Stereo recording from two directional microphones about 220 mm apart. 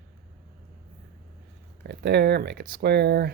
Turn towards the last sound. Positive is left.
turn(degrees=-50)  # may be behind; listen again after turning